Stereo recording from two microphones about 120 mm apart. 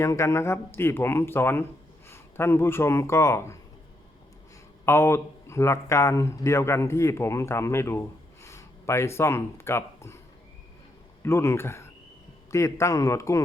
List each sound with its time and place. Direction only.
0.0 s speech: 25° left (ahead or behind)
4.9 s speech: 20° left (ahead or behind)
11.2 s speech: 20° left (ahead or behind)